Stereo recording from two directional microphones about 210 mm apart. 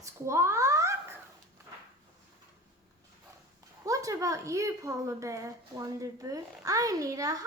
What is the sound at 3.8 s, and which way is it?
A woman's voice, 15° right (ahead or behind).